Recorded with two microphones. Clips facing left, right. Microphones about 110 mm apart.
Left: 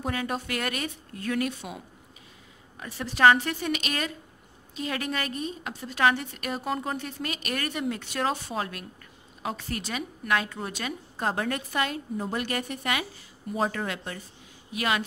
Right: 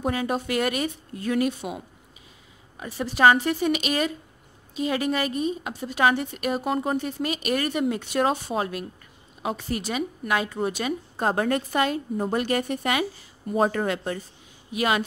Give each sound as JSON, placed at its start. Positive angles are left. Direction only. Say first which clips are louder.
{"t": 0.0, "sound": "speech", "louder": "right 5 dB", "side_deg": -20}
{"t": 2.8, "sound": "speech", "louder": "right 2 dB", "side_deg": -10}
{"t": 11.2, "sound": "a woman's voice", "louder": "right 5 dB", "side_deg": -35}